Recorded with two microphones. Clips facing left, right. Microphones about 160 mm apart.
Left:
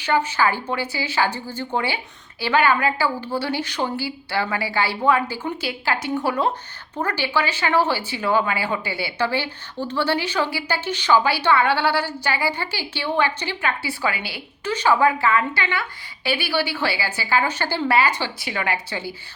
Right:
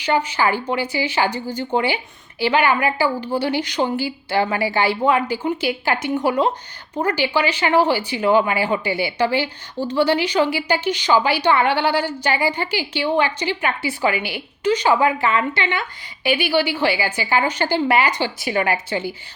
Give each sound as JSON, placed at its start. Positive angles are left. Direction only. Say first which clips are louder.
{"t": 0.0, "sound": "a woman's voice", "louder": "right 1 dB", "side_deg": -15}
{"t": 18.4, "sound": "a woman's voice", "louder": "right 8 dB", "side_deg": -30}
{"t": 18.9, "sound": "a woman's voice", "louder": "right 6 dB", "side_deg": -20}